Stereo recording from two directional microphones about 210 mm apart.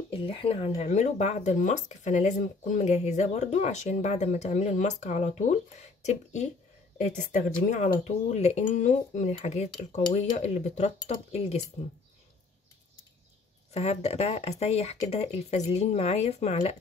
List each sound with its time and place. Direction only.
0.1 s speech: 25° left (ahead or behind)
13.7 s speech: 30° left (ahead or behind)